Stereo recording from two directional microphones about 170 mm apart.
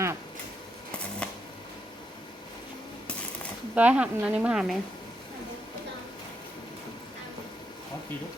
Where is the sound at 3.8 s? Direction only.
5° right (ahead or behind).